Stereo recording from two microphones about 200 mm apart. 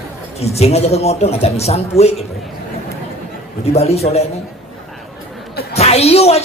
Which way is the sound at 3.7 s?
30° left (ahead or behind).